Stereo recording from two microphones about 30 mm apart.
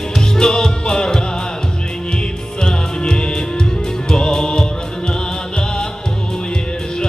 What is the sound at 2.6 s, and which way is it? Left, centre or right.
Music, left.